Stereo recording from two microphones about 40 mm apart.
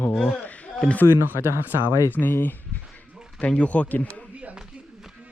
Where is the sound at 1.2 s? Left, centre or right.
Right.